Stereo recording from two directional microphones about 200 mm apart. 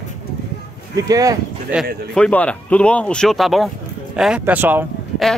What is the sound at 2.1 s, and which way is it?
Speech, 5° left (ahead or behind).